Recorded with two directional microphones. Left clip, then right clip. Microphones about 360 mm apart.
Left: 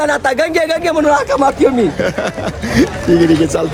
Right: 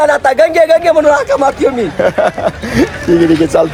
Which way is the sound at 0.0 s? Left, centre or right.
Centre.